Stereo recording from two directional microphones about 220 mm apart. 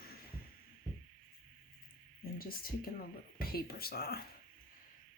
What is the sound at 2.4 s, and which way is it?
Speech, 40° left (ahead or behind).